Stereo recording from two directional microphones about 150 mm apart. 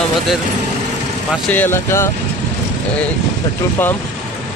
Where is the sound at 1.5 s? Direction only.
15° left (ahead or behind).